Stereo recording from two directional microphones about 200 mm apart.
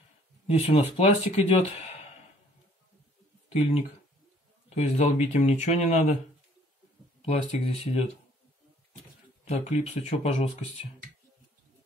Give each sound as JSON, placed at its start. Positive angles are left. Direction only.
{"t": 0.5, "sound": "speech", "side_deg": 30}
{"t": 3.4, "sound": "speech", "side_deg": 30}
{"t": 7.2, "sound": "speech", "side_deg": 30}
{"t": 9.4, "sound": "speech", "side_deg": 35}